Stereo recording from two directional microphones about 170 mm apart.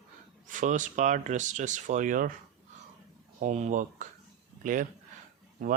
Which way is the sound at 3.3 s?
45° right (ahead or behind).